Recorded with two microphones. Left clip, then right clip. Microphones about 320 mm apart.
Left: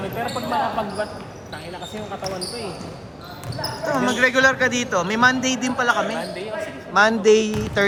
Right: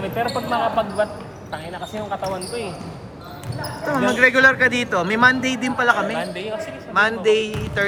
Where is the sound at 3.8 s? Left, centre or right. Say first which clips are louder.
Right 3 dB; centre.